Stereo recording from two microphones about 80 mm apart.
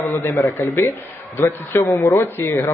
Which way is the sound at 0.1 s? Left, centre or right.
Left.